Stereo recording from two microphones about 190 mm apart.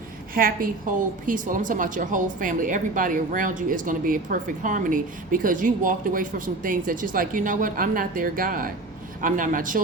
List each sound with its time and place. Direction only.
0.3 s a woman's voice: 50° right (ahead or behind)